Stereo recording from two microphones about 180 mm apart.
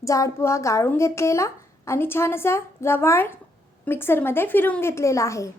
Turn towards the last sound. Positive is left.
turn(degrees=15)  # may be behind; listen again after turning